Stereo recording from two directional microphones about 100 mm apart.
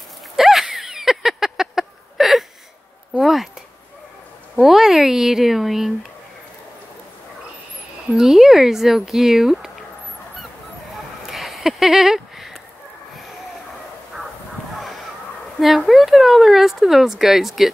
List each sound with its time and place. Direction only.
0.4 s a sound: 5° right (ahead or behind)
3.2 s speech: centre (ahead or behind)
4.6 s speech: 5° right (ahead or behind)
8.1 s speech: centre (ahead or behind)
11.2 s a sound: centre (ahead or behind)
15.6 s speech: centre (ahead or behind)